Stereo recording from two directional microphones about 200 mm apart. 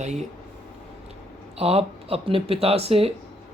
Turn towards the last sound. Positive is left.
turn(degrees=-30)  # may be behind; listen again after turning